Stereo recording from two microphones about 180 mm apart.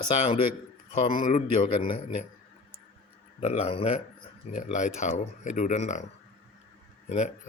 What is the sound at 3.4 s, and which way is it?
Speech, 35° left (ahead or behind).